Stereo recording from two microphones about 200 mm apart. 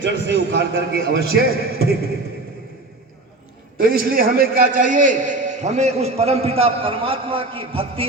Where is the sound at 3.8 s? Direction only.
45° right (ahead or behind); by 8.0 s 30° right (ahead or behind).